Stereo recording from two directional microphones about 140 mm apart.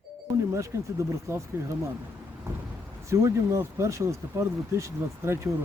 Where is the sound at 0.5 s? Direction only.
20° right (ahead or behind).